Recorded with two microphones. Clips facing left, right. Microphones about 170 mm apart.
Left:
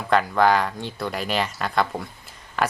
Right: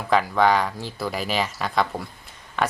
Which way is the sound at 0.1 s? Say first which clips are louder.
Even; centre (ahead or behind).